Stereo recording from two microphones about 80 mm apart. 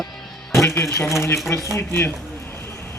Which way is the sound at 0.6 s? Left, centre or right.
Left.